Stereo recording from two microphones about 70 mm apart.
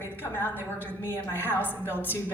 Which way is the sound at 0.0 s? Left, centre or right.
Left.